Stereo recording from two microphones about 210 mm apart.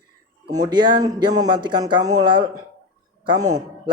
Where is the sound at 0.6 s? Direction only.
20° right (ahead or behind).